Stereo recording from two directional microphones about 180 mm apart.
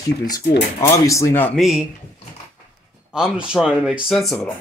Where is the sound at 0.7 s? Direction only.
15° left (ahead or behind).